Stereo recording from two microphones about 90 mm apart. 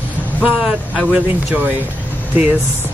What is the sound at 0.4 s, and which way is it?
Speech, 15° right (ahead or behind).